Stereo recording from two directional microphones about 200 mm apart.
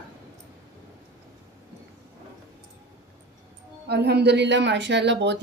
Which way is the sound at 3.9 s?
55° right (ahead or behind).